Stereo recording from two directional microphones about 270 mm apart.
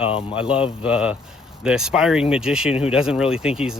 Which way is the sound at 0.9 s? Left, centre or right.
Centre.